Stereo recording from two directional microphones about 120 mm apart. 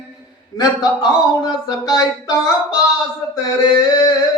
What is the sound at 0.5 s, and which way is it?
Speech, 35° left (ahead or behind).